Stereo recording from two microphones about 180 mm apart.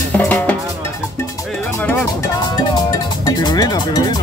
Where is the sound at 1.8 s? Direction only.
10° left (ahead or behind).